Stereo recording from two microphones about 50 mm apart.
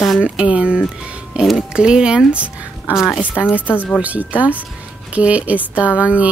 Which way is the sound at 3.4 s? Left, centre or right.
Right.